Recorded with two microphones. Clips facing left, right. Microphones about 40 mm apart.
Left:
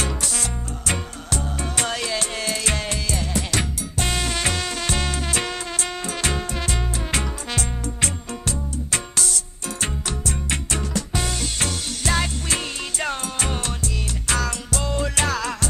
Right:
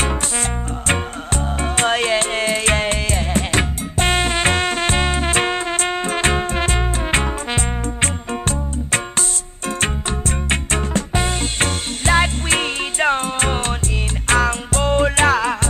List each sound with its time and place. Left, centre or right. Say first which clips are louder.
0.0 s music: right 5 dB; right